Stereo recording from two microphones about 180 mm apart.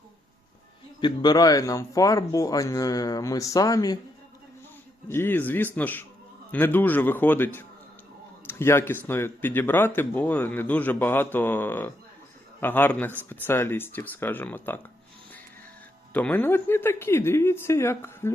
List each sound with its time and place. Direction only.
1.0 s speech: 25° left (ahead or behind)
5.0 s speech: 10° left (ahead or behind)
16.1 s speech: 10° left (ahead or behind)